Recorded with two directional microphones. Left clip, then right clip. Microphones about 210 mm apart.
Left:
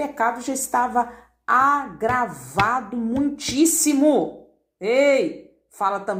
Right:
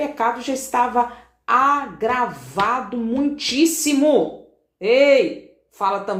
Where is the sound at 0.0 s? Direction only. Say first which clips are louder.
Right 2 dB; 35° left (ahead or behind).